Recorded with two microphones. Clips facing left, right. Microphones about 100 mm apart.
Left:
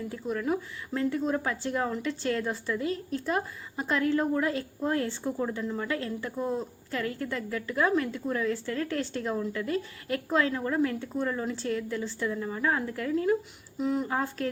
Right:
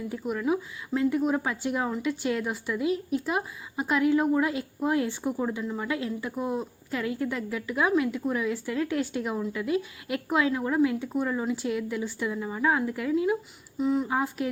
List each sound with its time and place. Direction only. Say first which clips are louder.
0.1 s a woman's voice: right 3 dB; 15° right (ahead or behind)
13.7 s speech: right 3 dB; centre (ahead or behind)
14.1 s a woman's voice: right 2 dB; 15° right (ahead or behind)